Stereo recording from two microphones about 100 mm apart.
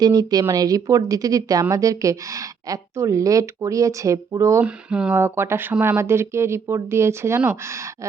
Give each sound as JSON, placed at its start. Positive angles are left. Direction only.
{"t": 0.0, "sound": "speech", "side_deg": -40}
{"t": 4.6, "sound": "speech", "side_deg": -10}
{"t": 5.1, "sound": "speech", "side_deg": -25}